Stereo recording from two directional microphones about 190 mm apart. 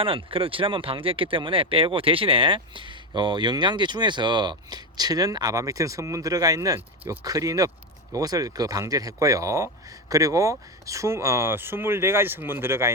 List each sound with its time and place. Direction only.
0.0 s speech: 30° right (ahead or behind); by 12.9 s 10° right (ahead or behind)